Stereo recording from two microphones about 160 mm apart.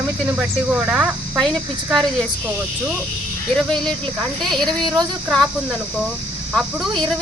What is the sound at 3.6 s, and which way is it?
Speech, 5° left (ahead or behind).